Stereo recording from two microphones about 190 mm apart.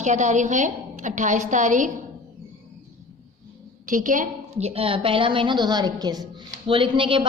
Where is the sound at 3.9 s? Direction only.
45° right (ahead or behind).